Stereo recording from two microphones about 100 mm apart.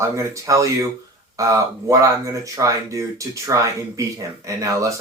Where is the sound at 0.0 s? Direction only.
30° right (ahead or behind).